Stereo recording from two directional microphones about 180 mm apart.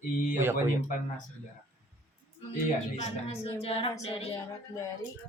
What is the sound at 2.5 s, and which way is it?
A woman's voice, 35° left (ahead or behind).